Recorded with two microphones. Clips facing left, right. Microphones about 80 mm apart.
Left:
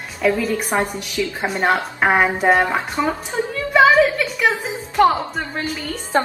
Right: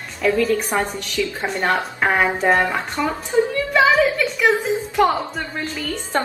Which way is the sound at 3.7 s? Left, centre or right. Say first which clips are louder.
Left 3 dB; centre.